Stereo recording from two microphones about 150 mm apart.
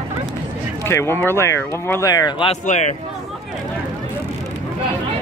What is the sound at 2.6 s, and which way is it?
Speech, 50° left (ahead or behind).